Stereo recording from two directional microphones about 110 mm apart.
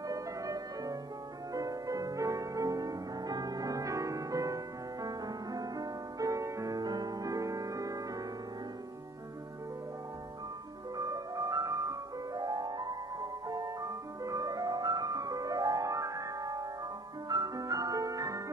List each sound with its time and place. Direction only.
0.1 s music: 30° right (ahead or behind)
11.0 s music: 30° right (ahead or behind)